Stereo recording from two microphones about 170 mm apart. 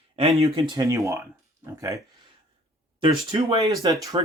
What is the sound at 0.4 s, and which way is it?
Speech, 30° right (ahead or behind).